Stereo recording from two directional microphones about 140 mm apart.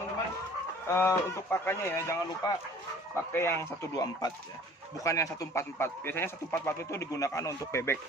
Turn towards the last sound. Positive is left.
turn(degrees=20)  # may be behind; listen again after turning